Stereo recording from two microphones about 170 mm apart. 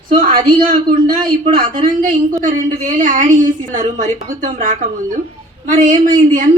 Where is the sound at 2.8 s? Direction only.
50° right (ahead or behind).